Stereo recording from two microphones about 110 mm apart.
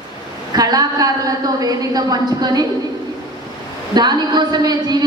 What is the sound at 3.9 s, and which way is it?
A woman's voice, 40° right (ahead or behind).